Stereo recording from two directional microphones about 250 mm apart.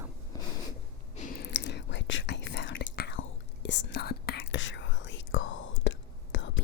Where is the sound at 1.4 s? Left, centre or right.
Left.